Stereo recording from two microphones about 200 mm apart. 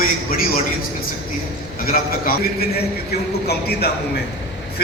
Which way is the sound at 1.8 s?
45° left (ahead or behind).